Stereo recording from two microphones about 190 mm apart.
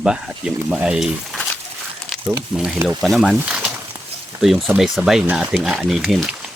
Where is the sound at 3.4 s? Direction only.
10° right (ahead or behind).